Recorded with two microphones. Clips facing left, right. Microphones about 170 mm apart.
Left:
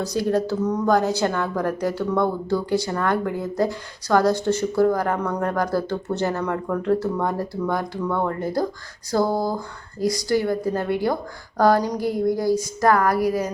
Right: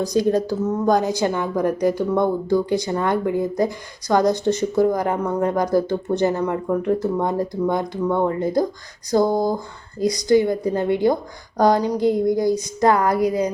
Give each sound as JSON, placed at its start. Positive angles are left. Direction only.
{"t": 0.0, "sound": "a woman's voice", "side_deg": -15}